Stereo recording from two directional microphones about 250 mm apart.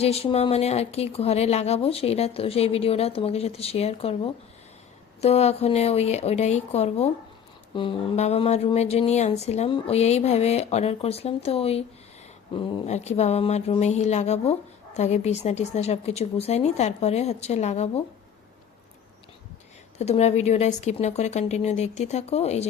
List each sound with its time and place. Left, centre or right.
0.0 s speech: left
20.0 s speech: left